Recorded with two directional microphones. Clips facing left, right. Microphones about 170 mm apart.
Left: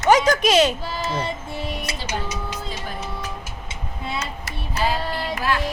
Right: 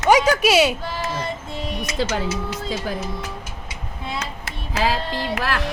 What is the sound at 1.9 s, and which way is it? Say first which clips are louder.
Music: right 9 dB; 30° left (ahead or behind).